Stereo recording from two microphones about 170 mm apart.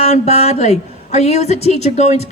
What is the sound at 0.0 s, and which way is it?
A woman's voice, 40° left (ahead or behind).